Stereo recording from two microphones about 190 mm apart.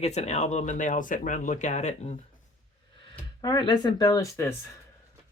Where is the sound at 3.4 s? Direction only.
20° left (ahead or behind).